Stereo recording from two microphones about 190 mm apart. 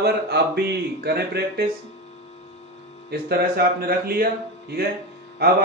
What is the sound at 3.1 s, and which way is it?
Speech, 55° right (ahead or behind).